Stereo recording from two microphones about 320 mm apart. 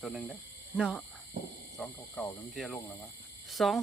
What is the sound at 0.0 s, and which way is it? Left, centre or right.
Speech, centre.